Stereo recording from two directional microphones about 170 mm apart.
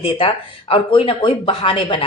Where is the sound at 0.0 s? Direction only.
30° left (ahead or behind).